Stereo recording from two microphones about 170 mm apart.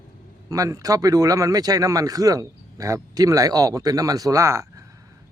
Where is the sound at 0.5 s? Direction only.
20° right (ahead or behind).